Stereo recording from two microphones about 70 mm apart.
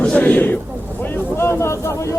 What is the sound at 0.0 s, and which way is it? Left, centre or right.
Speech, centre.